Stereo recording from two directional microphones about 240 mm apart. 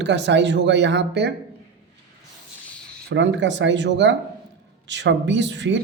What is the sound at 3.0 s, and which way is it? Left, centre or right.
Speech, right.